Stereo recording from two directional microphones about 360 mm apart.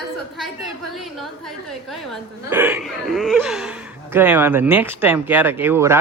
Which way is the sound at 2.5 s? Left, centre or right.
Centre.